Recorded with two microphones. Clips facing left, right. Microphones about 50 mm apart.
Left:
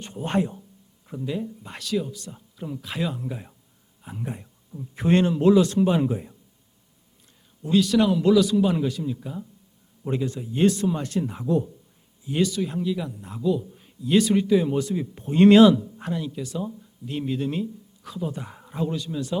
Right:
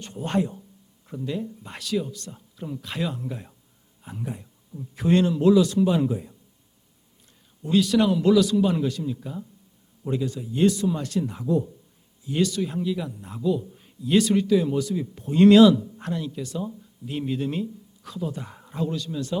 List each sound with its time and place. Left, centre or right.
0.0 s speech: left
1.0 s speech: centre
4.2 s speech: left
7.6 s speech: centre
10.1 s speech: left
11.5 s speech: left
12.2 s speech: centre
14.4 s speech: left
14.8 s speech: left
15.8 s a man's voice: centre